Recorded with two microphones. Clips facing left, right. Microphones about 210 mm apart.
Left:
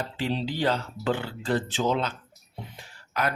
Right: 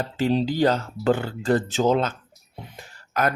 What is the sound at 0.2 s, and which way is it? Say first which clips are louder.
Speech: right 8 dB; 45° right (ahead or behind).